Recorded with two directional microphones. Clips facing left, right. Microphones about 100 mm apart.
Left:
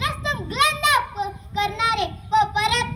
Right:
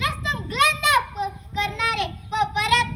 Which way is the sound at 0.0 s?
20° left (ahead or behind).